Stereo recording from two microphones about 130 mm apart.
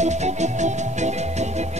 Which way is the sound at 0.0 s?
60° right (ahead or behind).